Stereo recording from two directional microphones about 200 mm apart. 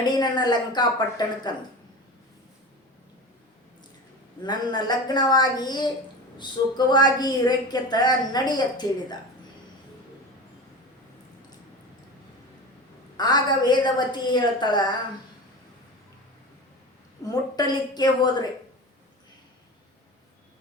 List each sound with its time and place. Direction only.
0.0 s a woman's voice: 20° left (ahead or behind)
4.4 s a woman's voice: 20° left (ahead or behind)
13.1 s a woman's voice: 20° left (ahead or behind)
17.6 s a woman's voice: 20° left (ahead or behind)